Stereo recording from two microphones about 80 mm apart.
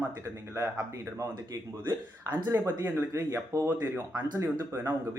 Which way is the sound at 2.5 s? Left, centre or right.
Right.